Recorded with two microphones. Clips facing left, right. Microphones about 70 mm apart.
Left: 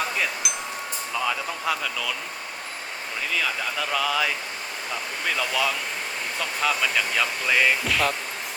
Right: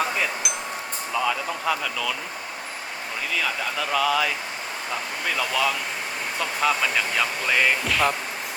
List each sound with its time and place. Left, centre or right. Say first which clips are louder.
0.4 s a sound: right 1 dB; centre
1.1 s speech: right 3 dB; centre
3.3 s speech: right 1 dB; centre
5.4 s speech: right 2 dB; centre